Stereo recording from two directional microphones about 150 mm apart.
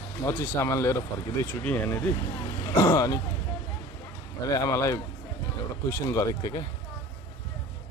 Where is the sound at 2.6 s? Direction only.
25° left (ahead or behind).